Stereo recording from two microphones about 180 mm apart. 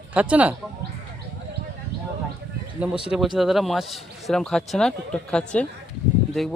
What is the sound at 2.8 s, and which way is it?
A man's voice, 5° right (ahead or behind).